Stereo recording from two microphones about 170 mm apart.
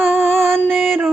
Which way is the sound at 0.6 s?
Centre (ahead or behind).